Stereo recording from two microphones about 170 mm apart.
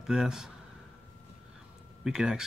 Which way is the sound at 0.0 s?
Centre (ahead or behind).